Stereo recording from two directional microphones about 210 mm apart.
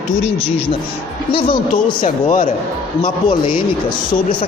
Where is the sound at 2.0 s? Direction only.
35° left (ahead or behind).